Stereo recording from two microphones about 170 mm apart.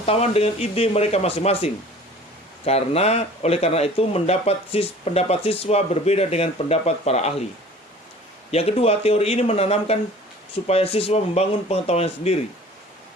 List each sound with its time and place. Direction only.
0.0 s speech: 35° left (ahead or behind)
8.4 s speech: 35° left (ahead or behind)